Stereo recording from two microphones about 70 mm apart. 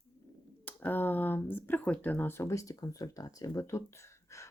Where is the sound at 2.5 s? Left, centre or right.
Left.